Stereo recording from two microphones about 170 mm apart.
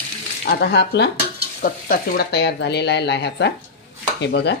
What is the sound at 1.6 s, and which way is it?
Speech, 65° left (ahead or behind).